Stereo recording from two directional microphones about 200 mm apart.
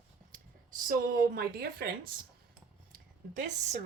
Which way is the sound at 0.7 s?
45° right (ahead or behind).